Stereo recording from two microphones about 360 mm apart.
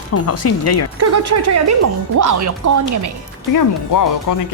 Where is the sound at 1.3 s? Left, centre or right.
Right.